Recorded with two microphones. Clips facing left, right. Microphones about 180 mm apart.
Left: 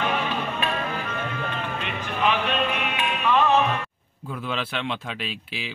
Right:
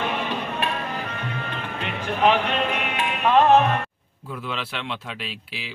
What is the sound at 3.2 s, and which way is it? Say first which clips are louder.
Music: right 4 dB; 55° right (ahead or behind).